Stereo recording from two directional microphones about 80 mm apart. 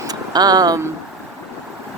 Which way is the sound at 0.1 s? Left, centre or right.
Right.